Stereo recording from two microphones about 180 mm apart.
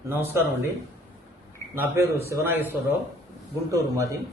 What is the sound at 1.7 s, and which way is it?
A man's voice, 15° right (ahead or behind).